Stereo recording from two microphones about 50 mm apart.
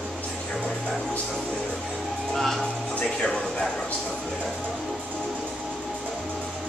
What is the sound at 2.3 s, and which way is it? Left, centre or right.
Speech, centre.